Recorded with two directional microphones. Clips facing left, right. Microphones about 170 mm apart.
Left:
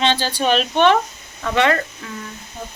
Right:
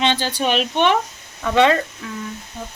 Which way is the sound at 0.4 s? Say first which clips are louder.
Left 3 dB; 15° right (ahead or behind).